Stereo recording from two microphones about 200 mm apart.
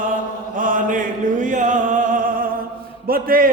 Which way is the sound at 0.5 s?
40° right (ahead or behind).